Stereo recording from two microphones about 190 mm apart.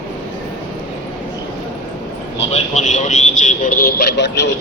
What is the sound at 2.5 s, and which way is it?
Vehicle, 40° left (ahead or behind).